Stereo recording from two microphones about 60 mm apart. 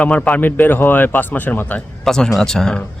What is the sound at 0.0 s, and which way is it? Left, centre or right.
Speech, left.